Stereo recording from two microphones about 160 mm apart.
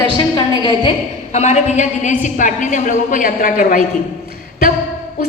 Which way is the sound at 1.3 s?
45° left (ahead or behind).